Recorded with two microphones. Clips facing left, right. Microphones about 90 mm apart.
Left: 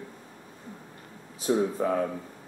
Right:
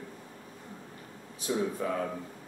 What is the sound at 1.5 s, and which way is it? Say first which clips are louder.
Speech: left 5 dB; 30° left (ahead or behind).